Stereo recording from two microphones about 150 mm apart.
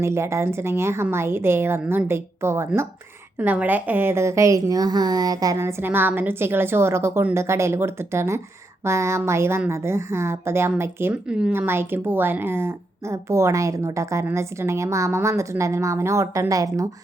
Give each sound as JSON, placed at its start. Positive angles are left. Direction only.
{"t": 0.0, "sound": "a woman's voice", "side_deg": -20}